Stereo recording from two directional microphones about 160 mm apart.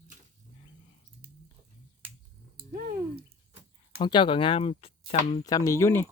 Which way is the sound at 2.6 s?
70° right (ahead or behind).